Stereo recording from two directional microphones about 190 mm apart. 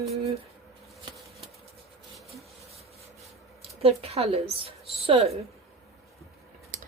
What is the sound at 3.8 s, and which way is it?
Speech, 30° right (ahead or behind).